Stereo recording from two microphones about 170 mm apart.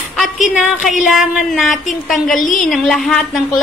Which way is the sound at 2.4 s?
50° left (ahead or behind).